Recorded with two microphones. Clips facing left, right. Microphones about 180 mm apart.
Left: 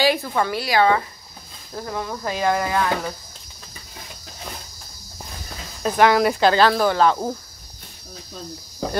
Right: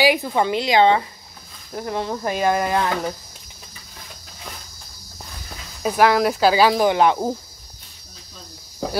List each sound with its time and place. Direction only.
0.0 s speech: 15° right (ahead or behind)
5.8 s speech: 5° right (ahead or behind)
8.8 s a sound: centre (ahead or behind)